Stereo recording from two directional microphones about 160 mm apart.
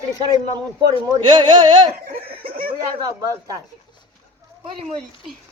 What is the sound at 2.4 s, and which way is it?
Chuckle, 65° right (ahead or behind).